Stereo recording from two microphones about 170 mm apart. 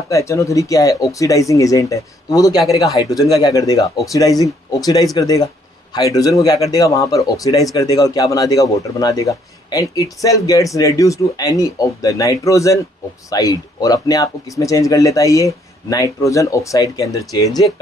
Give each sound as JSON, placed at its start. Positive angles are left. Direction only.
{"t": 0.1, "sound": "speech", "side_deg": 20}